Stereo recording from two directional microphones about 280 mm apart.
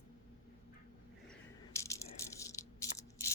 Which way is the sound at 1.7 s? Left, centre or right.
Centre.